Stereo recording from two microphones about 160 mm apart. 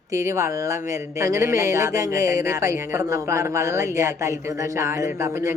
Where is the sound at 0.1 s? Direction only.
20° right (ahead or behind).